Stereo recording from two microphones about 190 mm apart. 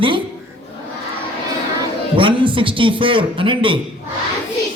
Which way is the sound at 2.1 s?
25° right (ahead or behind).